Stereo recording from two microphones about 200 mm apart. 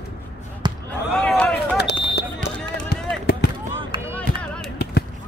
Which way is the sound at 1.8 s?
55° left (ahead or behind).